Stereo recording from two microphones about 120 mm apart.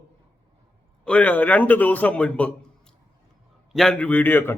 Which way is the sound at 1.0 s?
10° left (ahead or behind).